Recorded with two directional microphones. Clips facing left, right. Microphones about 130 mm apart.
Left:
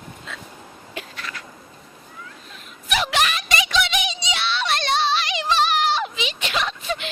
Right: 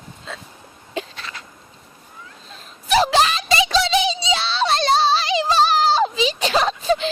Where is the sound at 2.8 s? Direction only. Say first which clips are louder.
Right 6 dB; 35° right (ahead or behind).